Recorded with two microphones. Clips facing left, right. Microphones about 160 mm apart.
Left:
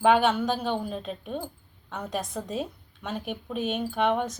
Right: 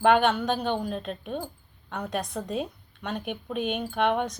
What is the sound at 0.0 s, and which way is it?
A woman's voice, 5° left (ahead or behind).